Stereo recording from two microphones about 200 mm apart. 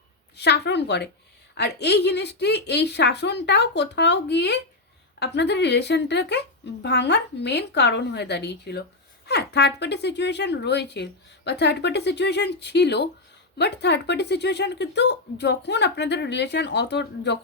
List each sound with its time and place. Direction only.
0.3 s speech: 55° left (ahead or behind)